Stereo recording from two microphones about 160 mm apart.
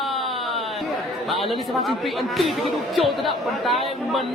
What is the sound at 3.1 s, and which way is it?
Speech, centre (ahead or behind).